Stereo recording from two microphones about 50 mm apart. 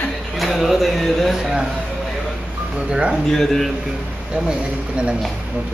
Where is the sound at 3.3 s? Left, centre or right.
Centre.